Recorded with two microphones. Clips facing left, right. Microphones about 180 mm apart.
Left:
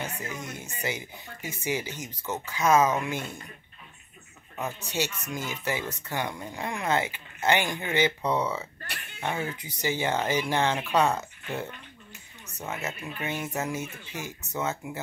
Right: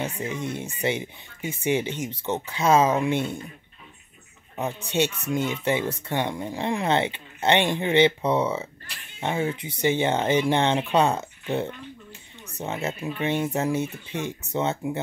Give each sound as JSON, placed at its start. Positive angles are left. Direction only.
{"t": 0.0, "sound": "speech", "side_deg": -30}
{"t": 4.6, "sound": "speech", "side_deg": -25}
{"t": 8.8, "sound": "a sound", "side_deg": 65}
{"t": 9.2, "sound": "speech", "side_deg": -25}